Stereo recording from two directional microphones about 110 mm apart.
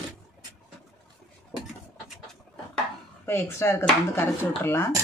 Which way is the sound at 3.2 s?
25° left (ahead or behind).